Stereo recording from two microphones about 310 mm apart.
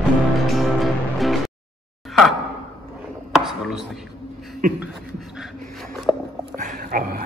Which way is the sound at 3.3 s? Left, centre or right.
Centre.